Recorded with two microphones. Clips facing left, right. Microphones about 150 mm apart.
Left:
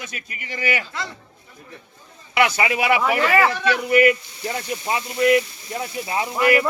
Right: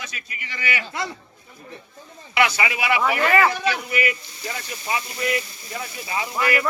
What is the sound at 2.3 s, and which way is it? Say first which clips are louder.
Speech: left 2 dB; 45° left (ahead or behind).